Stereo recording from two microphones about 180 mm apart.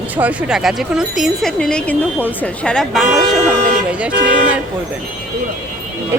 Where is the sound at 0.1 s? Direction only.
10° right (ahead or behind).